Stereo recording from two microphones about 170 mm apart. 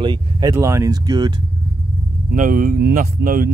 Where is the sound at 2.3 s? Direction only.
55° right (ahead or behind).